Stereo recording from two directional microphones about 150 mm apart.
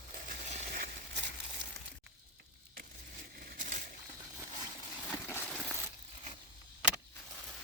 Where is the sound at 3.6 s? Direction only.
60° right (ahead or behind).